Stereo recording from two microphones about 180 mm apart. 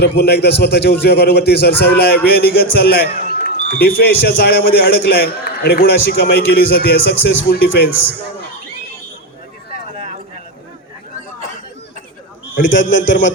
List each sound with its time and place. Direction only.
0.2 s a man's voice: 65° left (ahead or behind)
12.6 s a man's voice: 90° left